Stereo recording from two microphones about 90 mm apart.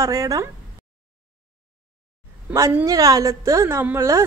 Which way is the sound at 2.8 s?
40° right (ahead or behind).